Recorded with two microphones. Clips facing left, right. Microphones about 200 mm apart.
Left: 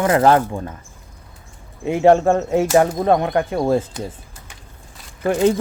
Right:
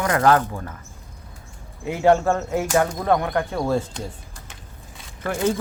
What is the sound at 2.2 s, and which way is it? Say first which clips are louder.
Speech: left 5 dB; 15° left (ahead or behind).